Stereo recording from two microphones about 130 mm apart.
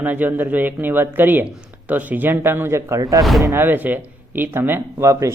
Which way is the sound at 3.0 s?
30° right (ahead or behind).